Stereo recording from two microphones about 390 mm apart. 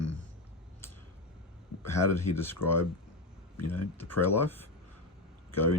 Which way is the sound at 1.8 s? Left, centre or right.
Centre.